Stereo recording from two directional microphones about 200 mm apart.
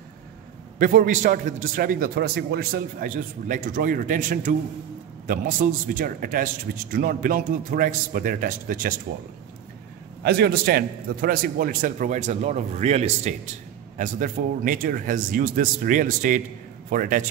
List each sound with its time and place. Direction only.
0.7 s a man's voice: 40° right (ahead or behind)
10.2 s a man's voice: 55° right (ahead or behind)